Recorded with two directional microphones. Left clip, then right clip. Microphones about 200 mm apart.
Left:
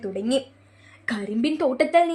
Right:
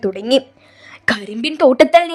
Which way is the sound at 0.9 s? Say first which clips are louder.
Right 12 dB; 55° right (ahead or behind).